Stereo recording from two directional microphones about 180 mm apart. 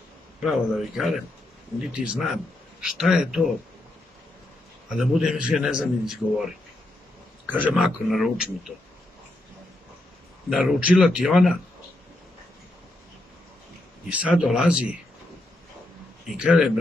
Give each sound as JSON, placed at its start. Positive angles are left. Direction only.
{"t": 0.4, "sound": "a man's voice", "side_deg": 0}
{"t": 4.8, "sound": "a man's voice", "side_deg": 0}
{"t": 10.5, "sound": "a man's voice", "side_deg": -5}
{"t": 14.1, "sound": "a man's voice", "side_deg": -5}
{"t": 16.3, "sound": "a man's voice", "side_deg": -5}